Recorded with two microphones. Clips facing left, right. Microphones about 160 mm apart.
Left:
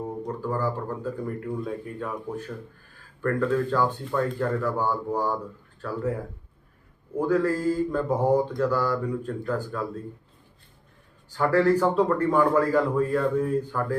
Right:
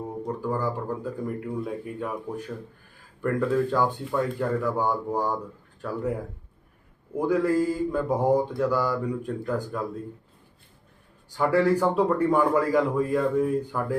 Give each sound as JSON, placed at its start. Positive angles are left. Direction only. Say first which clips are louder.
{"t": 0.3, "sound": "a man's voice", "louder": "right 1 dB", "side_deg": -15}
{"t": 7.2, "sound": "a man's voice", "louder": "right 1 dB", "side_deg": -15}
{"t": 11.3, "sound": "a man's voice", "louder": "left 1 dB", "side_deg": -15}